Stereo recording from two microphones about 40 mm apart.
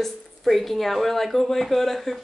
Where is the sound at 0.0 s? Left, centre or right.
Centre.